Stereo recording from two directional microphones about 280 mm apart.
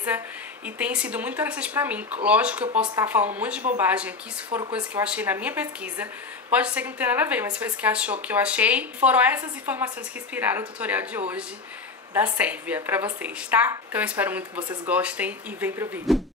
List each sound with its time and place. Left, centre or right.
0.7 s a woman's voice: centre
4.5 s speech: centre
4.7 s a woman's voice: centre